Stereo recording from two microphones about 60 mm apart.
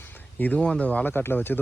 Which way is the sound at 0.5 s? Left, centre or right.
Centre.